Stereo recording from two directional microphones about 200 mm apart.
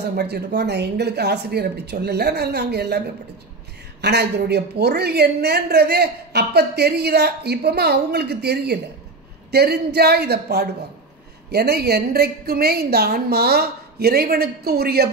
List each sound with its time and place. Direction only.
0.1 s speech: 55° right (ahead or behind)
4.0 s a woman's voice: 55° right (ahead or behind)